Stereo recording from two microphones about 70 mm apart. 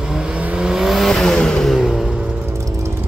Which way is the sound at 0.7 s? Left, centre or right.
Centre.